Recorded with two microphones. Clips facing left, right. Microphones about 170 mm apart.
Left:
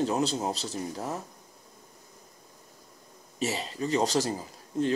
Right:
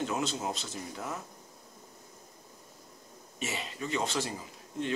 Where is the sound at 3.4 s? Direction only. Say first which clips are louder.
Left 6 dB; 35° left (ahead or behind).